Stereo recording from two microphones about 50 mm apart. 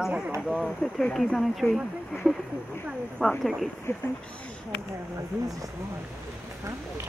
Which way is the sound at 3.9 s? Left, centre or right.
Left.